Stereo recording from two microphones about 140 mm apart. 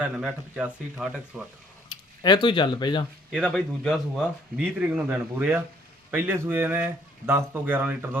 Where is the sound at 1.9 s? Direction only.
30° left (ahead or behind).